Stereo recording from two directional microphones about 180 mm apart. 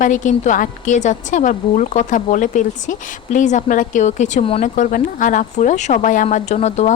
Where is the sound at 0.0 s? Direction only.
45° left (ahead or behind).